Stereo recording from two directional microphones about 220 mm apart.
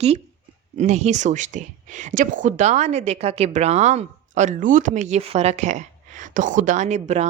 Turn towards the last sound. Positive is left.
turn(degrees=-30)  # may be behind; listen again after turning